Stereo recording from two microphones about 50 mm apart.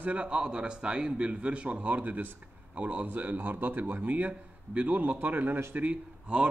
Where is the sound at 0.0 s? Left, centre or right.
Right.